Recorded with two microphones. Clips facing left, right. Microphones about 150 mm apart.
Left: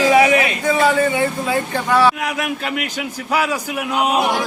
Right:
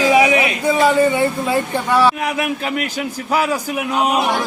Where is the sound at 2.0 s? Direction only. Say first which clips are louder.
Right 1 dB; 5° right (ahead or behind).